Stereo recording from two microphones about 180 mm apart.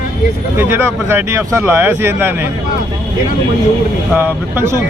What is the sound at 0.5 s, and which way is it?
Speech, 10° right (ahead or behind).